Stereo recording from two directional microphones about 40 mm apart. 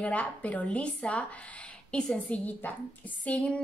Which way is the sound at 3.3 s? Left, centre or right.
Left.